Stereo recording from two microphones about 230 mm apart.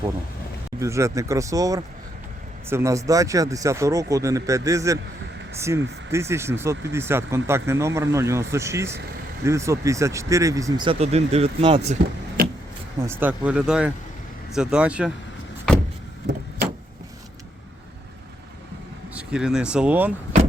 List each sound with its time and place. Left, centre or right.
0.8 s speech: centre
12.4 s vehicle: right
13.1 s speech: centre
19.1 s speech: centre